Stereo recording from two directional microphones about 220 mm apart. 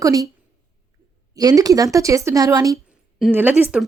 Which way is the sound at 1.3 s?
15° right (ahead or behind).